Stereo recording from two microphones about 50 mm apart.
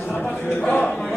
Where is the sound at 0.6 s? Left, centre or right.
Left.